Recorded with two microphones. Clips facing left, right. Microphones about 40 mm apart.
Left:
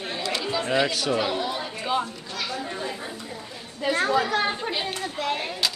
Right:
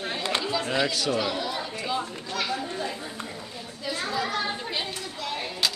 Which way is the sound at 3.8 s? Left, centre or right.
Left.